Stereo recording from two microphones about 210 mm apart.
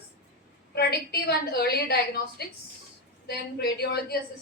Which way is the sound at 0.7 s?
50° left (ahead or behind).